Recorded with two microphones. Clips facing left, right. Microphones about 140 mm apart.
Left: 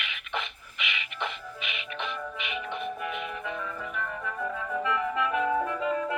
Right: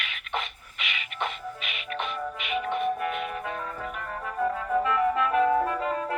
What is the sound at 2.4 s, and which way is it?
Music, 50° right (ahead or behind).